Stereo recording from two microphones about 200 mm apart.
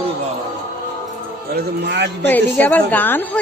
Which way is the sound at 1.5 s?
55° right (ahead or behind).